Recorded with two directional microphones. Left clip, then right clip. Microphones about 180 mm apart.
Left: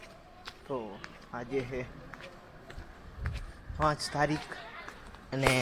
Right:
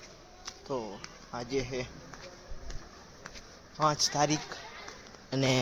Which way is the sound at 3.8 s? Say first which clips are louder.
Right 2 dB; centre (ahead or behind).